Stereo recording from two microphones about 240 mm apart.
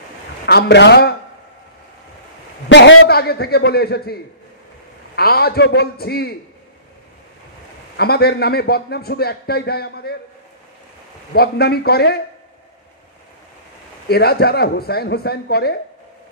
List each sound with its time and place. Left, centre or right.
0.5 s a man's voice: left
2.7 s a man's voice: left
8.0 s a man's voice: left
11.3 s a man's voice: left
14.0 s a man's voice: left